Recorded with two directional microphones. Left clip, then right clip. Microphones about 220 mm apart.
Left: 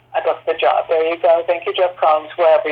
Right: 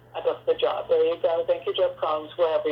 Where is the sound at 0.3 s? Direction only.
25° left (ahead or behind).